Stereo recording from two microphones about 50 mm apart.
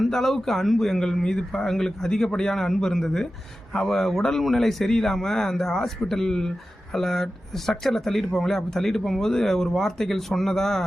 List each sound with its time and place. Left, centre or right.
0.0 s speech: centre